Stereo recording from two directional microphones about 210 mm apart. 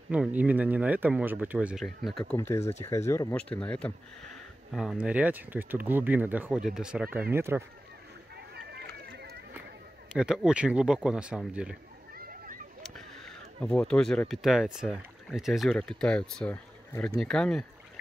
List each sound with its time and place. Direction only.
0.1 s speech: 5° right (ahead or behind)
2.3 s speech: 10° left (ahead or behind); by 7.6 s 10° right (ahead or behind)
8.4 s rowboat: 50° right (ahead or behind)
10.1 s speech: 5° right (ahead or behind)
13.6 s speech: 5° left (ahead or behind)